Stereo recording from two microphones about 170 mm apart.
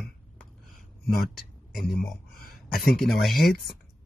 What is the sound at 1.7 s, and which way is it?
Speech, centre (ahead or behind).